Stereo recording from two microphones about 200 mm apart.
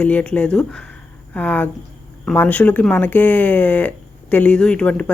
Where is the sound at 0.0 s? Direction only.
5° left (ahead or behind).